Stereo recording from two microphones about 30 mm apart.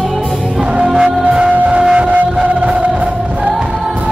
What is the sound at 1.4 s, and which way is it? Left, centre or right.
Music, right.